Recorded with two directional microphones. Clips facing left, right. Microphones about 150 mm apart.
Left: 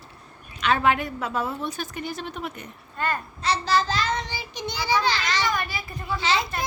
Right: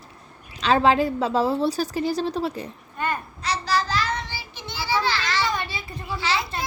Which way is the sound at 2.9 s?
15° right (ahead or behind).